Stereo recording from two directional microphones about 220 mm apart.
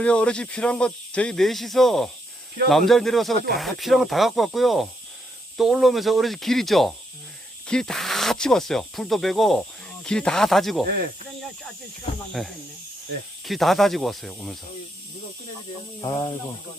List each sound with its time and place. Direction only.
0.0 s speech: 5° left (ahead or behind)
12.3 s speech: centre (ahead or behind)
16.0 s speech: 15° left (ahead or behind)